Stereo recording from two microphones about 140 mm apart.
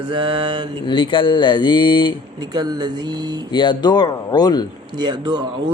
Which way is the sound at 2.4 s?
30° right (ahead or behind).